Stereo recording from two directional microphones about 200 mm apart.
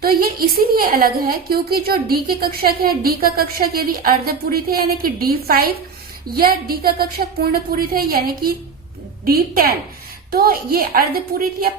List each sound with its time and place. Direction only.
0.0 s a woman's voice: 50° right (ahead or behind)